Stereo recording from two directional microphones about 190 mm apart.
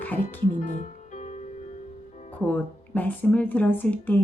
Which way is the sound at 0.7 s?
40° left (ahead or behind).